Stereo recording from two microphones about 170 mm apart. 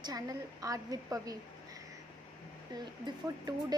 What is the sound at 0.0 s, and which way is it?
A woman's voice, 20° right (ahead or behind).